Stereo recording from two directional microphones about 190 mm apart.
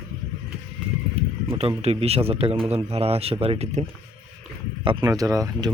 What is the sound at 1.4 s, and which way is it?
Speech, 30° right (ahead or behind).